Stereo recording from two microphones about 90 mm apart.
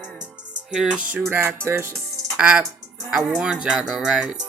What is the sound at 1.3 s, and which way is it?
Music, 25° right (ahead or behind).